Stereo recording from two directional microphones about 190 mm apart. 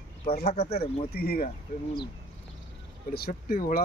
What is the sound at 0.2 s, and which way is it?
Speech, 35° left (ahead or behind).